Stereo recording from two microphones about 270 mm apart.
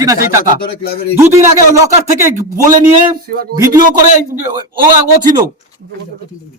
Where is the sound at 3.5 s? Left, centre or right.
Centre.